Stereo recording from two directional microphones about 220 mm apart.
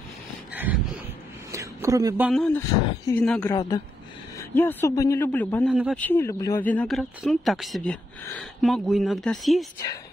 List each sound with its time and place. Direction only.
0.5 s a sound: 5° right (ahead or behind)
1.5 s a man's voice: 15° right (ahead or behind); by 3.5 s 5° left (ahead or behind)
3.5 s a man's voice: 20° left (ahead or behind); by 9.7 s centre (ahead or behind)